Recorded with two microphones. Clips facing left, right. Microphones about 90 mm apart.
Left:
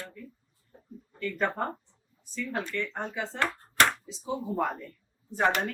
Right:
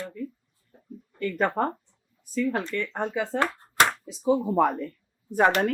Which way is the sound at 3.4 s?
15° right (ahead or behind).